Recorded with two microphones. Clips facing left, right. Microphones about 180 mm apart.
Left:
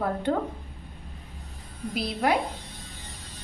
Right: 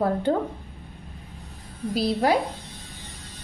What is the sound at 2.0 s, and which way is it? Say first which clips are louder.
Speech: right 4 dB; 35° right (ahead or behind).